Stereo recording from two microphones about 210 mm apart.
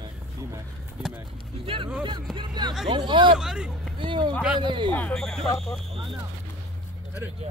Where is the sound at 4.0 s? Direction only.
25° right (ahead or behind).